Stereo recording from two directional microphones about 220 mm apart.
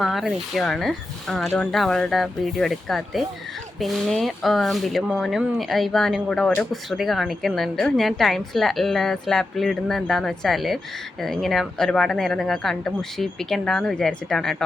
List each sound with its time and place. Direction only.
0.0 s speech: centre (ahead or behind)